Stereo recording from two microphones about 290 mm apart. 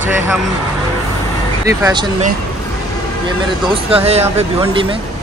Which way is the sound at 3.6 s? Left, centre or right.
Centre.